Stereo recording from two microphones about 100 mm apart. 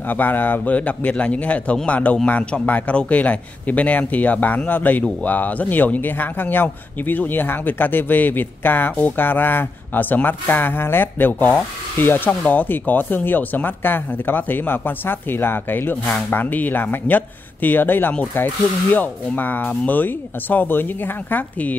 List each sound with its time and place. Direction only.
0.1 s a man's voice: 20° left (ahead or behind)